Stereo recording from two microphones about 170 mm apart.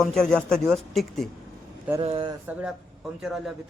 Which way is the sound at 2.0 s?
30° right (ahead or behind).